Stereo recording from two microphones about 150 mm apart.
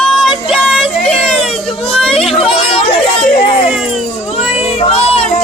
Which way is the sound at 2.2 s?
40° left (ahead or behind).